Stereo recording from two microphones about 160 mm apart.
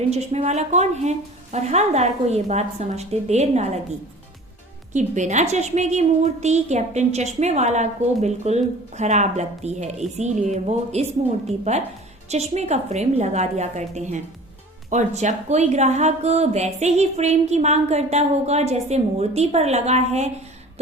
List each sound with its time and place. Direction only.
0.1 s a woman's voice: 45° right (ahead or behind)
4.9 s a woman's voice: 50° right (ahead or behind)